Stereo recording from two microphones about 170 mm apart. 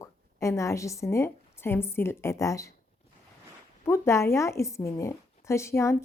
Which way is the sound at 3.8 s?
15° left (ahead or behind).